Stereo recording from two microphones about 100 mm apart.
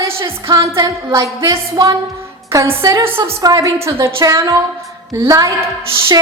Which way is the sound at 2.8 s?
35° right (ahead or behind).